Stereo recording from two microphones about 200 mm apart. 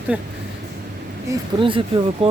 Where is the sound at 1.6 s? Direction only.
25° right (ahead or behind).